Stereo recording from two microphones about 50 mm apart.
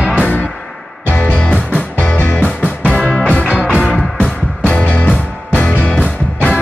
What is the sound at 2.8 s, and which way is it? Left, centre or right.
Music, right.